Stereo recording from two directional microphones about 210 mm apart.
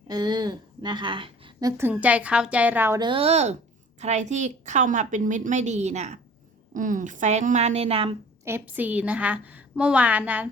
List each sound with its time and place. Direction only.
0.1 s a woman's voice: 20° right (ahead or behind)
1.8 s a woman's voice: 5° right (ahead or behind); by 8.1 s 25° right (ahead or behind)
8.4 s a woman's voice: 10° right (ahead or behind)